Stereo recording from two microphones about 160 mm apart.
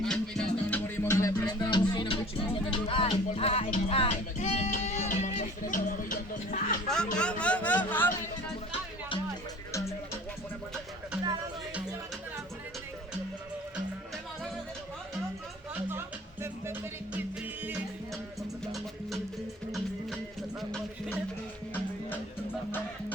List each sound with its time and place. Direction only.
0.0 s music: 5° left (ahead or behind)
0.9 s music: 20° left (ahead or behind); by 6.7 s 60° left (ahead or behind)
6.8 s speech: 5° left (ahead or behind)
15.7 s music: 15° right (ahead or behind)
18.6 s music: centre (ahead or behind)
20.6 s a sound: centre (ahead or behind)